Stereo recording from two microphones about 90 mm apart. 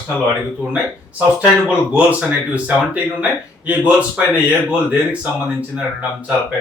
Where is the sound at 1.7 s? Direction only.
15° right (ahead or behind).